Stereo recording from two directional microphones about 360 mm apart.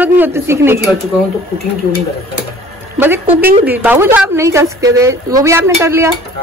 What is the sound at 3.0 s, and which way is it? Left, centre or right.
A woman's voice, centre.